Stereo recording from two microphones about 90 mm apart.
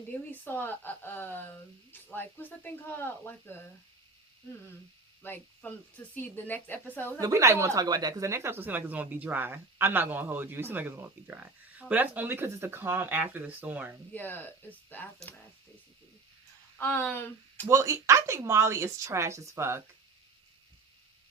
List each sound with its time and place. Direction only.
0.1 s speech: 20° left (ahead or behind)
5.2 s speech: 20° left (ahead or behind)
7.2 s speech: 35° right (ahead or behind); by 13.9 s 20° right (ahead or behind)
14.1 s speech: 20° left (ahead or behind)
16.7 s speech: 25° left (ahead or behind)
17.7 s a woman's voice: 35° right (ahead or behind)